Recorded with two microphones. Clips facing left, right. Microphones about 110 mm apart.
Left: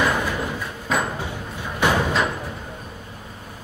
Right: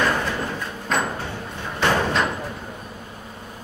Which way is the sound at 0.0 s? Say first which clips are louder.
Even; 10° left (ahead or behind).